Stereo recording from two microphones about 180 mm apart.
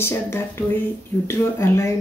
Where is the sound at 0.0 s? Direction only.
15° left (ahead or behind).